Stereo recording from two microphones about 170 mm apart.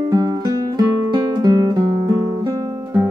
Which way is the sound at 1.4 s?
25° right (ahead or behind).